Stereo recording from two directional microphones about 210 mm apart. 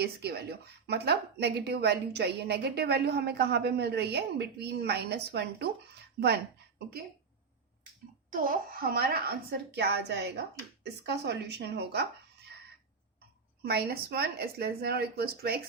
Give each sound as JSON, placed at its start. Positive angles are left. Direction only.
{"t": 0.0, "sound": "a woman's voice", "side_deg": -50}
{"t": 8.3, "sound": "a woman's voice", "side_deg": -40}
{"t": 13.6, "sound": "a woman's voice", "side_deg": -50}